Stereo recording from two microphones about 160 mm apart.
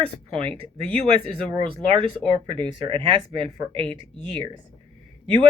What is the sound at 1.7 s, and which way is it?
Speech, 35° right (ahead or behind).